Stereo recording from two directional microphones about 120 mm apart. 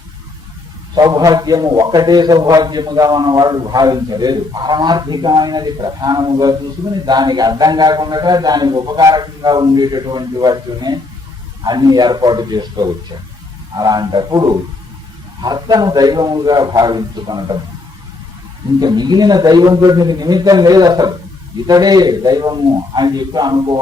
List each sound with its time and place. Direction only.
0.9 s a man's voice: 30° right (ahead or behind)
18.8 s a man's voice: 35° right (ahead or behind)